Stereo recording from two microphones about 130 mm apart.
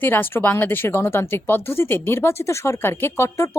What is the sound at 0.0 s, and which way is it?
A woman's voice, 15° left (ahead or behind).